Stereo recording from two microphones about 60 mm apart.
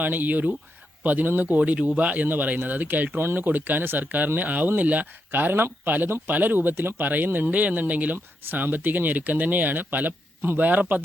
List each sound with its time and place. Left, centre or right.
0.0 s speech: right